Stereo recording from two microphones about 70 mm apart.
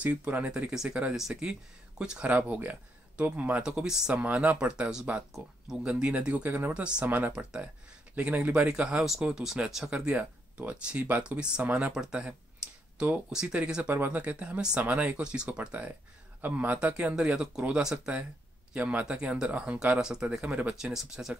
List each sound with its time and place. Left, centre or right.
0.0 s speech: centre
4.2 s speech: centre
7.1 s speech: right; by 21.4 s centre